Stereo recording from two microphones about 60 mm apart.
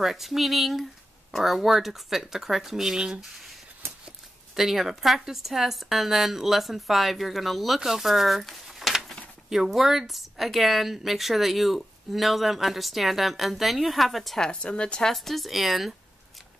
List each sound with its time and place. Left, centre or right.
0.0 s speech: centre
4.6 s speech: centre
14.5 s speech: centre
15.1 s speech: centre